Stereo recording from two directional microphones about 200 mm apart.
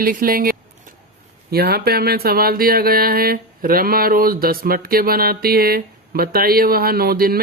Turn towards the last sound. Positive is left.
turn(degrees=-50)  # may be behind; listen again after turning